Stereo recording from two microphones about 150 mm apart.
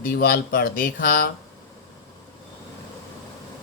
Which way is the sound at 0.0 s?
70° left (ahead or behind).